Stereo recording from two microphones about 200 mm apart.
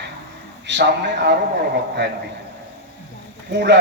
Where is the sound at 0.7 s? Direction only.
60° right (ahead or behind).